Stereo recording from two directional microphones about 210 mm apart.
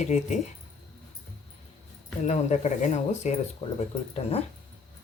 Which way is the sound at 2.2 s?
35° left (ahead or behind).